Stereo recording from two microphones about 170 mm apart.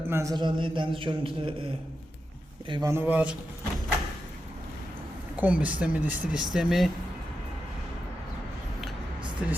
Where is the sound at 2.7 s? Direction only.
20° right (ahead or behind).